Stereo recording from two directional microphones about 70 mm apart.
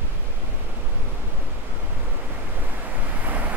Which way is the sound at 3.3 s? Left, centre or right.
Right.